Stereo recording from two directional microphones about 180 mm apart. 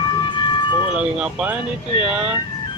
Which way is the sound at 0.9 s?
5° right (ahead or behind).